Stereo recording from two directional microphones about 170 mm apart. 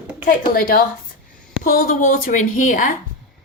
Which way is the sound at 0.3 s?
55° left (ahead or behind).